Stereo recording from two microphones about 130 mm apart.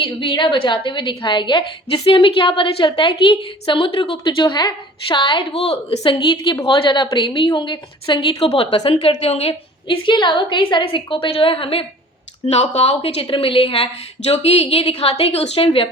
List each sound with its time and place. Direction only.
0.0 s a woman's voice: 40° left (ahead or behind)
5.5 s a woman's voice: 55° left (ahead or behind)
6.0 s a woman's voice: 35° left (ahead or behind); by 9.5 s 50° left (ahead or behind)
9.5 s a woman's voice: 40° left (ahead or behind)
12.5 s a woman's voice: 55° left (ahead or behind)